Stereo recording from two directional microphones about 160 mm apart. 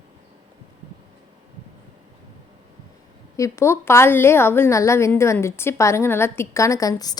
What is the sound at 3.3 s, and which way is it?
A woman's voice, 20° left (ahead or behind).